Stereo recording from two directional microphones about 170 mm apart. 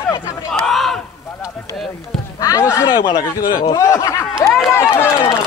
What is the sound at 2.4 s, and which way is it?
A man's voice, 15° left (ahead or behind).